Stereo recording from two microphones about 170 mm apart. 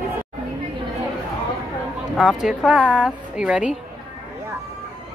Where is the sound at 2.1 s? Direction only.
Centre (ahead or behind).